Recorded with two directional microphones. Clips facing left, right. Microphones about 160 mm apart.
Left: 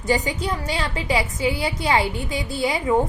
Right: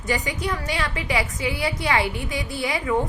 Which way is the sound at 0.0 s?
30° left (ahead or behind).